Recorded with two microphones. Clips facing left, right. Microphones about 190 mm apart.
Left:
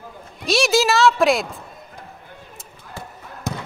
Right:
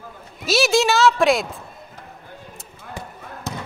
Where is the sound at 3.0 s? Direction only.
15° right (ahead or behind).